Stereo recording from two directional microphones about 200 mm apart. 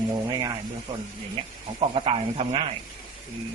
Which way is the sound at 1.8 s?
30° right (ahead or behind).